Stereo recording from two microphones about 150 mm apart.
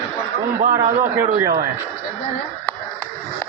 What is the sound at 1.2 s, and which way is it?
Speech, 15° right (ahead or behind).